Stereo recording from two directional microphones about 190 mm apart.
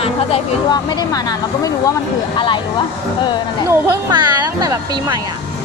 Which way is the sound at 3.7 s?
15° right (ahead or behind).